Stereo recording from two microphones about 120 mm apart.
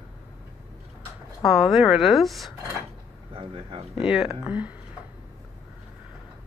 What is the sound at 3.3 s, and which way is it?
Speech, 50° right (ahead or behind).